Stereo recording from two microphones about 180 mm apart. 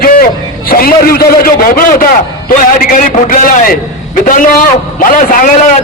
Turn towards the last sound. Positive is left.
turn(degrees=50)  # may be behind; listen again after turning